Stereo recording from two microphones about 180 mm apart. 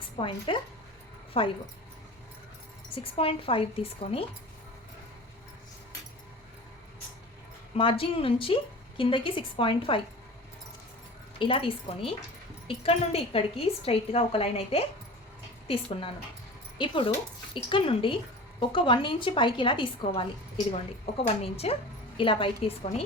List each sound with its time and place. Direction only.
0.2 s a woman's voice: 25° left (ahead or behind)
2.9 s a woman's voice: 30° left (ahead or behind)
7.8 s a woman's voice: 30° left (ahead or behind)
11.3 s a woman's voice: 30° left (ahead or behind)
21.2 s a woman's voice: 35° left (ahead or behind)